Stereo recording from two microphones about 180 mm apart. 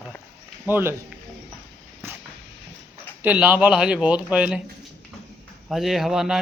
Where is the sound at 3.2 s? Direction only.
10° right (ahead or behind).